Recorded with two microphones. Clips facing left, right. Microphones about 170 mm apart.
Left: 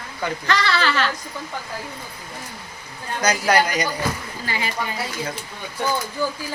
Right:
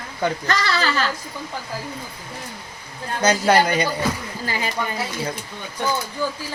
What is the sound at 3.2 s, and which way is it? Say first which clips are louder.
Speech: right 2 dB; 30° right (ahead or behind).